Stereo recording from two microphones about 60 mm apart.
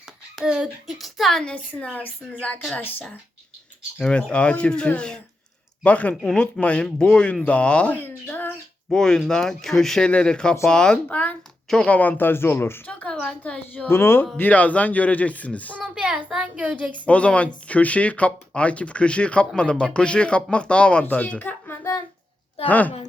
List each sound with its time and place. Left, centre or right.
0.4 s a child's voice: centre
0.9 s a woman's voice: centre
1.5 s speech: left
3.9 s speech: centre
5.8 s speech: left
7.9 s speech: left
8.9 s speech: centre
11.1 s speech: left
12.9 s speech: left
13.8 s speech: left
14.3 s speech: left
15.8 s a child's voice: centre
17.1 s speech: left
22.6 s speech: left